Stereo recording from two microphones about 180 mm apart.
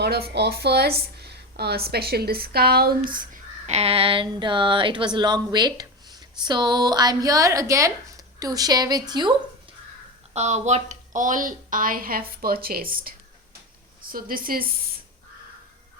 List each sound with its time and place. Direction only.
0.0 s speech: 65° right (ahead or behind)
3.8 s speech: 30° right (ahead or behind)
10.3 s a woman's voice: 40° right (ahead or behind)